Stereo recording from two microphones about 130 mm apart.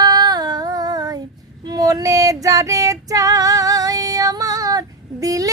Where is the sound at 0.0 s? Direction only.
30° right (ahead or behind).